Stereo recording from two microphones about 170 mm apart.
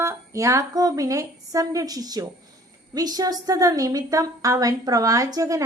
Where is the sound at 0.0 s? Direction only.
15° right (ahead or behind).